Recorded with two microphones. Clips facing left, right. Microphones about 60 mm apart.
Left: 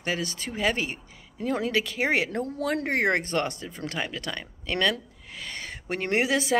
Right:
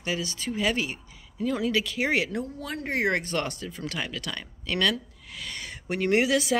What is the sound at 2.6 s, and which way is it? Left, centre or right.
Speech, left.